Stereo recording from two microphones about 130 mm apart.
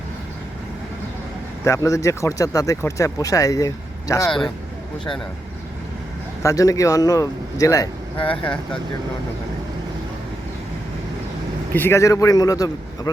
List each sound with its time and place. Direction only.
1.6 s speech: 25° left (ahead or behind)
4.3 s speech: 5° left (ahead or behind)
6.4 s speech: 25° left (ahead or behind)
8.2 s speech: 10° left (ahead or behind)
11.7 s speech: 15° left (ahead or behind)